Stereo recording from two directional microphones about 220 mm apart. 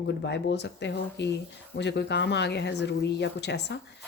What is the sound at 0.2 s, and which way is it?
Speech, 50° left (ahead or behind).